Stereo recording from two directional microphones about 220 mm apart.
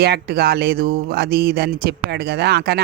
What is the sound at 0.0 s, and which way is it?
Speech, 45° right (ahead or behind).